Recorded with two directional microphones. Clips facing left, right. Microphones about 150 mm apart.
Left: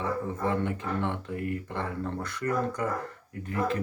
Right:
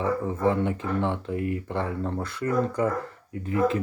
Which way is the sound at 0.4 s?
20° right (ahead or behind).